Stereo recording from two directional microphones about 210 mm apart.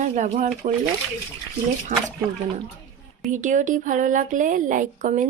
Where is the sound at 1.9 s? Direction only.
40° right (ahead or behind).